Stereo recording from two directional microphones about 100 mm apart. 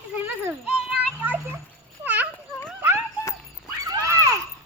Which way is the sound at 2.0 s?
15° right (ahead or behind).